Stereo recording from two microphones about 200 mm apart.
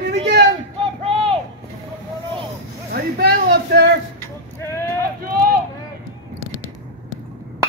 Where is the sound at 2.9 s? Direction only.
55° right (ahead or behind).